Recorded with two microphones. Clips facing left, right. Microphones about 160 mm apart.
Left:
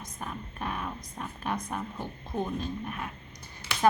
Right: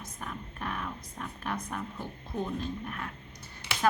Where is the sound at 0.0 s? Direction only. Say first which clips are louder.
Left 2 dB; 20° left (ahead or behind).